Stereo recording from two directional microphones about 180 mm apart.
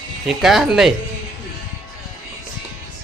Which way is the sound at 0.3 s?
Centre (ahead or behind).